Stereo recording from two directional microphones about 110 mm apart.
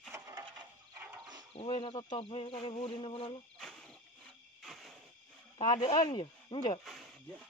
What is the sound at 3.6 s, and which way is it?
Cricket, 5° left (ahead or behind).